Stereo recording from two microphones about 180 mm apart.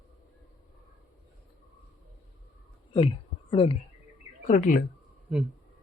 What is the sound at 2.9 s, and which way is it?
Speech, 30° left (ahead or behind).